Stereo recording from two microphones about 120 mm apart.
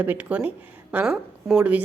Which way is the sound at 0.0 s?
15° right (ahead or behind).